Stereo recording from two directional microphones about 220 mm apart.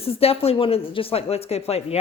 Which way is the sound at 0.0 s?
25° left (ahead or behind).